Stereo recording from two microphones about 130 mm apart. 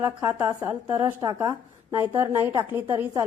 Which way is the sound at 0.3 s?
15° right (ahead or behind).